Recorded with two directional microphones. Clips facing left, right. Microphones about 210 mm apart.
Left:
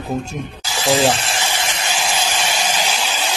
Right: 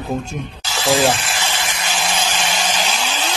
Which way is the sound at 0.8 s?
20° left (ahead or behind).